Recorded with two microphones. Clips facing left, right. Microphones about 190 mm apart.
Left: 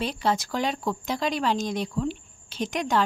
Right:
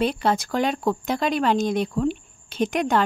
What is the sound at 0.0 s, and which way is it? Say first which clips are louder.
A woman's voice: right 4 dB; 55° right (ahead or behind).